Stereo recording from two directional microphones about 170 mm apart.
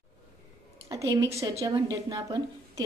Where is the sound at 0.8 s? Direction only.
20° right (ahead or behind).